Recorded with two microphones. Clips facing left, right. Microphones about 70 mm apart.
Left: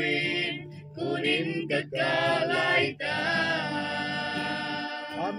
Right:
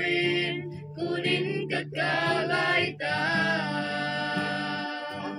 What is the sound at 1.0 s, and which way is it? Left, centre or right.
Music, centre.